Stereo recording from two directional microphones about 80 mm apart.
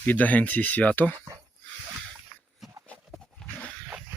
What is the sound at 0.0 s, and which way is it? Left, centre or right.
Speech, left.